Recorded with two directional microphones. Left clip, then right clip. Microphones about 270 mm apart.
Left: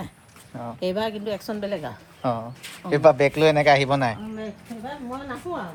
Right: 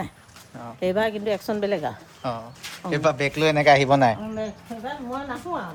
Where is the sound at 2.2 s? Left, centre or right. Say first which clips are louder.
Left 3 dB; left; by 4.4 s centre.